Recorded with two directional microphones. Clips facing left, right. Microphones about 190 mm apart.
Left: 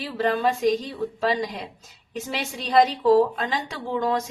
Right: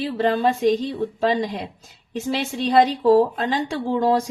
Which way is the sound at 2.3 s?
30° right (ahead or behind).